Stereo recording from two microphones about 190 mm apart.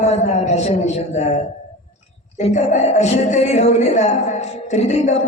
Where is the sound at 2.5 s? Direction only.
40° left (ahead or behind).